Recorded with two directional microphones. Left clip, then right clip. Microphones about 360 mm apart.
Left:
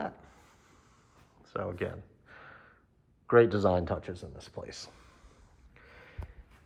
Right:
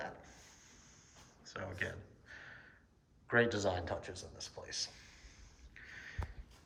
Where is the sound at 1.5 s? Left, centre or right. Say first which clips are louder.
Left 7 dB; centre.